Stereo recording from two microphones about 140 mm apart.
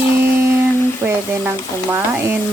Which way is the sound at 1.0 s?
15° right (ahead or behind).